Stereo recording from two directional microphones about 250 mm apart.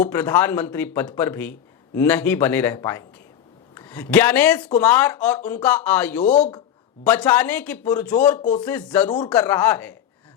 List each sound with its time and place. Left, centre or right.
0.0 s speech: centre
8.4 s speech: left
8.6 s speech: centre
9.0 s speech: centre
9.3 s speech: centre